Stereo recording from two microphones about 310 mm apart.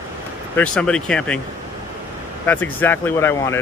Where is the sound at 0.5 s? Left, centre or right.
Centre.